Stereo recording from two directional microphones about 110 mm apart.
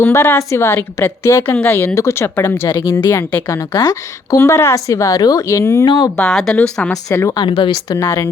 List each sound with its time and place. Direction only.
0.0 s a woman's voice: 25° left (ahead or behind)
5.8 s speech: 40° left (ahead or behind)
6.1 s a woman's voice: 5° left (ahead or behind)
6.9 s a woman's voice: 30° left (ahead or behind)
7.3 s speech: 45° left (ahead or behind)
7.9 s a woman's voice: 25° left (ahead or behind)